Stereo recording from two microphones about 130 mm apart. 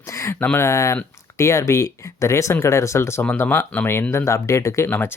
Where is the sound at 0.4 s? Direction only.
20° left (ahead or behind).